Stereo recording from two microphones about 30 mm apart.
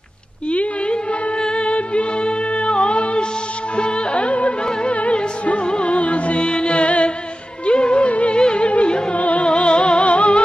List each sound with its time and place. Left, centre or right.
0.5 s a sound: left
1.4 s music: left
6.4 s music: left
9.1 s music: left
9.4 s music: left